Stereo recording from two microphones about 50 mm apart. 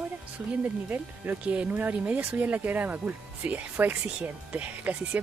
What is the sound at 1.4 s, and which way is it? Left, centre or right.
Speech, right.